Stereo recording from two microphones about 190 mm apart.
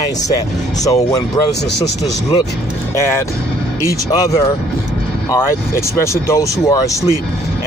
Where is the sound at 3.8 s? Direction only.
15° left (ahead or behind).